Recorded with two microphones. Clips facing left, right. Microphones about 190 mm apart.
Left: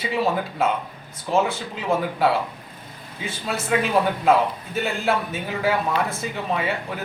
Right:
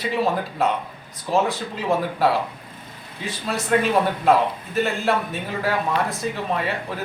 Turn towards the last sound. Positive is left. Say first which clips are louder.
# even
turn(degrees=0)  # may be behind; listen again after turning